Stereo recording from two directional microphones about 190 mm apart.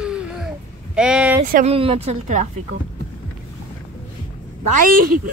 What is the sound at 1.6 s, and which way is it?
Speech, 30° right (ahead or behind).